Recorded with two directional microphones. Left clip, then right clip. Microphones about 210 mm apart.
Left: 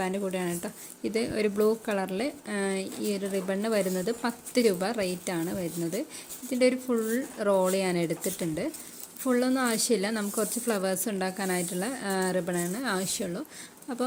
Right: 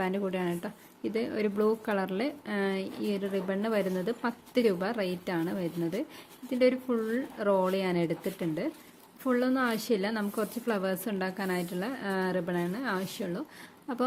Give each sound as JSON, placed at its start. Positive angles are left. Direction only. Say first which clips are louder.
{"t": 0.0, "sound": "speech", "louder": "left 1 dB", "side_deg": 0}